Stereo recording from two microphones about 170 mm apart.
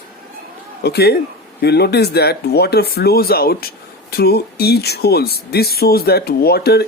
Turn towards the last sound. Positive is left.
turn(degrees=70)  # may be behind; listen again after turning